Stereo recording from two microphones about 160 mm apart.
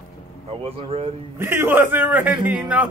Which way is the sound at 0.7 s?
35° right (ahead or behind).